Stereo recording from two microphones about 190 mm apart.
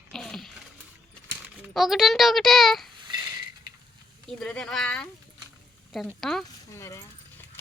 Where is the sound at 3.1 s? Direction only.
20° right (ahead or behind).